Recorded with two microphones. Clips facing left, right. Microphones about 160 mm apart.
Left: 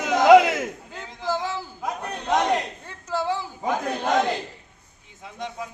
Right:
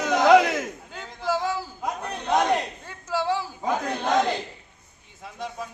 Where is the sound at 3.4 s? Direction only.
20° left (ahead or behind).